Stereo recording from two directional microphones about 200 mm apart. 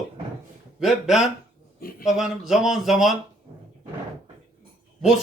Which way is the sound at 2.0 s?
Centre (ahead or behind).